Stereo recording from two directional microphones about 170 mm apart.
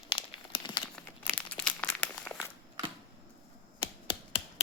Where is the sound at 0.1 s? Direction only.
25° left (ahead or behind).